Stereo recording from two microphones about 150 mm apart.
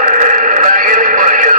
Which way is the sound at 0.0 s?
55° right (ahead or behind).